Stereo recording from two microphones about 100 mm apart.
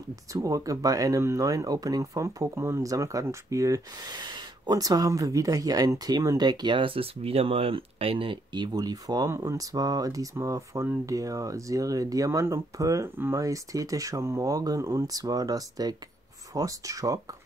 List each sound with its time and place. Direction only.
0.3 s speech: 35° right (ahead or behind)
4.1 s speech: 45° right (ahead or behind); by 8.6 s 60° right (ahead or behind)
8.7 s speech: 40° right (ahead or behind)